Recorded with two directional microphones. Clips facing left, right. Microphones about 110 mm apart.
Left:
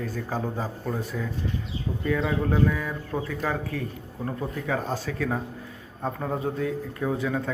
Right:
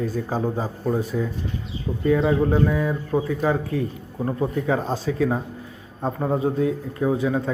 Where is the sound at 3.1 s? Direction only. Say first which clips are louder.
Right 6 dB; 10° right (ahead or behind).